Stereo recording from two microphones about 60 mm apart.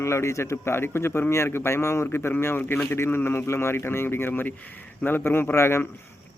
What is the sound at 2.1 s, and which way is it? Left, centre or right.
Speech, left.